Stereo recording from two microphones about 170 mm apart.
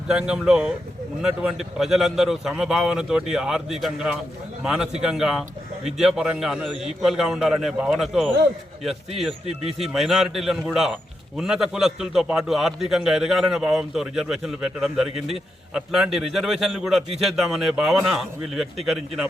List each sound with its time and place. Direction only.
0.1 s a man's voice: 5° right (ahead or behind)